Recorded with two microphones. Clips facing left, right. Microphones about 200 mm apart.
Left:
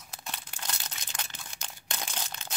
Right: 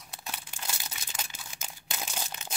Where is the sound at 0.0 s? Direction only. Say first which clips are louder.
Even; 5° right (ahead or behind).